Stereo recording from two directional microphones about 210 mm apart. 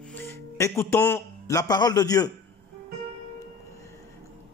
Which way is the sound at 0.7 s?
10° left (ahead or behind).